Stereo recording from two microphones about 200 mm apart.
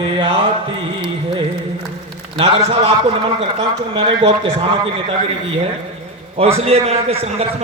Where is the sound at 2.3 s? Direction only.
30° right (ahead or behind).